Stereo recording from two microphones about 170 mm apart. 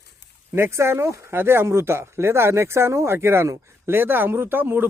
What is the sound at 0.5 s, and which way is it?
Speech, 15° right (ahead or behind).